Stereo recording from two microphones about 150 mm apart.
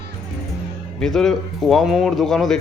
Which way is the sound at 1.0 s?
5° left (ahead or behind).